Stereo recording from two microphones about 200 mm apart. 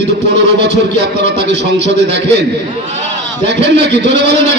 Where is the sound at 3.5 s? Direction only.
60° right (ahead or behind).